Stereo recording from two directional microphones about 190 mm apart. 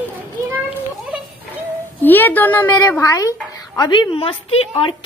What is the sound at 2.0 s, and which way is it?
A woman's voice, 10° left (ahead or behind).